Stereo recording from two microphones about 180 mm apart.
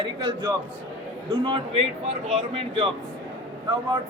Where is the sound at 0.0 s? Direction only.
25° right (ahead or behind).